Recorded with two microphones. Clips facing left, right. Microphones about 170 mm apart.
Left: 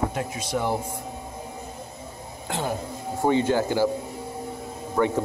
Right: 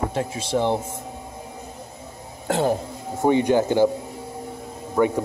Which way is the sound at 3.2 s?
20° right (ahead or behind).